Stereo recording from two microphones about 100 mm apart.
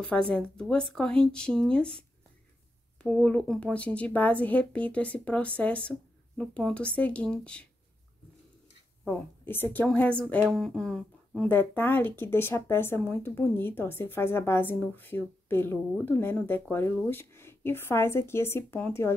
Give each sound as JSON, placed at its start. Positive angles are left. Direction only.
{"t": 0.0, "sound": "a woman's voice", "side_deg": 10}
{"t": 9.0, "sound": "a woman's voice", "side_deg": 20}
{"t": 11.4, "sound": "speech", "side_deg": 20}